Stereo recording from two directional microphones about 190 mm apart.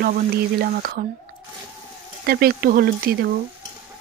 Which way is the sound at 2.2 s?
55° right (ahead or behind).